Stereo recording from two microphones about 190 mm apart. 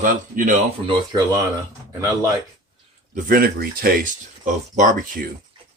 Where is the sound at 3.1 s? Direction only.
50° right (ahead or behind).